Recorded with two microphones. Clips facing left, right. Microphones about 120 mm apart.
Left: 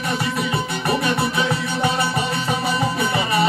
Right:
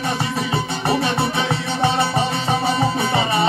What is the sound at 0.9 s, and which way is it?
Music, 30° right (ahead or behind).